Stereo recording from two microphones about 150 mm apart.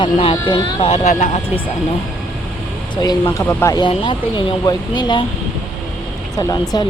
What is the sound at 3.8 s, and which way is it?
Speech, 35° left (ahead or behind).